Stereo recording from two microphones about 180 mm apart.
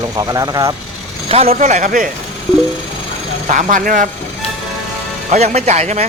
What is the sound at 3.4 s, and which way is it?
Speech, 45° right (ahead or behind).